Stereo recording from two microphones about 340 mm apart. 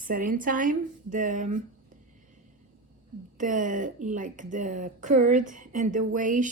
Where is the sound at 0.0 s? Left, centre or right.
Right.